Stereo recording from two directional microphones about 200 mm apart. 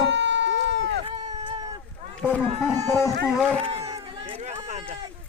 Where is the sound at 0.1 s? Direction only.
65° right (ahead or behind).